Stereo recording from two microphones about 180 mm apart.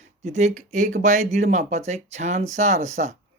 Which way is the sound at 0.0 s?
40° right (ahead or behind).